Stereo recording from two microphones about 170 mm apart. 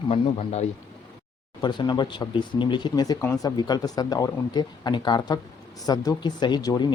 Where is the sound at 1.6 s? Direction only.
25° left (ahead or behind).